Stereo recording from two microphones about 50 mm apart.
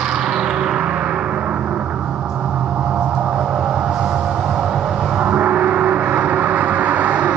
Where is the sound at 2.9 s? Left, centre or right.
Right.